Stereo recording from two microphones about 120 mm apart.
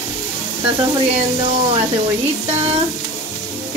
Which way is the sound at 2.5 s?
60° right (ahead or behind).